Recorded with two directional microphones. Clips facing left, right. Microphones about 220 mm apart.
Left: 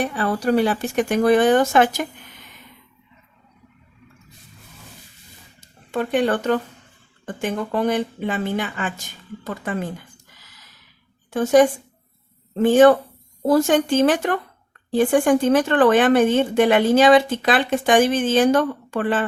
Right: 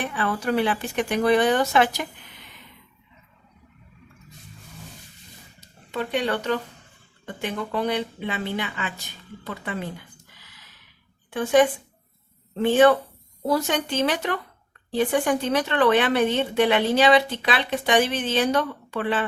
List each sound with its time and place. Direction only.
0.0 s speech: 40° left (ahead or behind)
5.5 s speech: 50° left (ahead or behind)
11.3 s speech: 45° left (ahead or behind)